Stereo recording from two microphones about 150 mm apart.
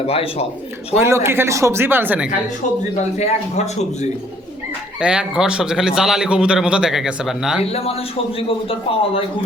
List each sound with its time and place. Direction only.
0.0 s a man's voice: 40° left (ahead or behind)
0.9 s speech: 15° right (ahead or behind)
3.2 s speech: 50° left (ahead or behind)
4.9 s speech: 5° right (ahead or behind)
7.6 s a man's voice: 40° left (ahead or behind)